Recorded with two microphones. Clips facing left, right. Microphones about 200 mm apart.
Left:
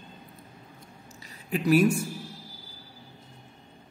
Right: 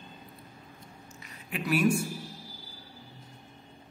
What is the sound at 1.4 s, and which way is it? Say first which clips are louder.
Speech: left 5 dB; 40° left (ahead or behind).